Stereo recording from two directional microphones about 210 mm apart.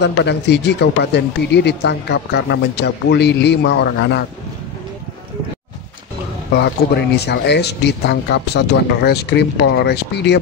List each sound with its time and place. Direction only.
0.0 s speech: 55° left (ahead or behind)
7.2 s speech: 50° left (ahead or behind)